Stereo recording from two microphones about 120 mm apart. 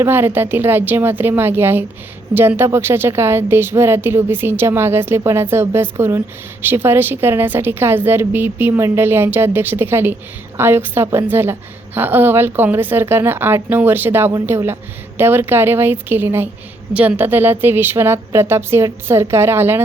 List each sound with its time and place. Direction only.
0.0 s a woman's voice: 20° right (ahead or behind)